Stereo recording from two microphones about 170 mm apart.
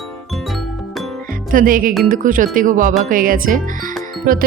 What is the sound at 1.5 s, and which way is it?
Music, 55° right (ahead or behind).